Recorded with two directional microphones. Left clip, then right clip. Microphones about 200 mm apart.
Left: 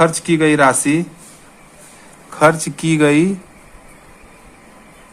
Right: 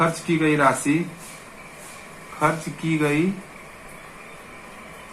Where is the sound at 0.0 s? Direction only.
60° left (ahead or behind).